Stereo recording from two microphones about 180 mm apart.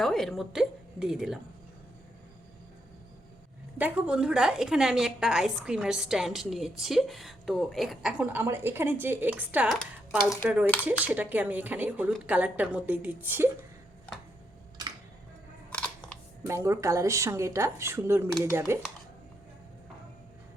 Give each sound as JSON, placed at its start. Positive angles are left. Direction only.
{"t": 0.0, "sound": "a woman's voice", "side_deg": 0}
{"t": 3.8, "sound": "a woman's voice", "side_deg": -5}
{"t": 15.7, "sound": "camera", "side_deg": 5}
{"t": 16.5, "sound": "a woman's voice", "side_deg": -15}